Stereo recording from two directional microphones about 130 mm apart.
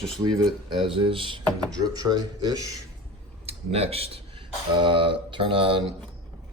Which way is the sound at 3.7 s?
50° right (ahead or behind).